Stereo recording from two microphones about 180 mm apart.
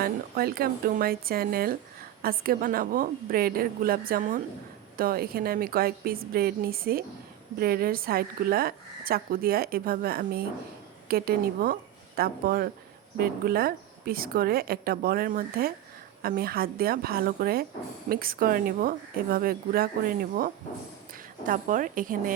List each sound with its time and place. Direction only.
0.0 s a woman's voice: 55° right (ahead or behind)
21.4 s a woman's voice: 50° right (ahead or behind)